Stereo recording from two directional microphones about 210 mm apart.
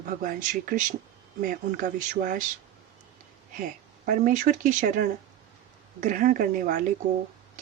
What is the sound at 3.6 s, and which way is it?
A woman's voice, 40° right (ahead or behind).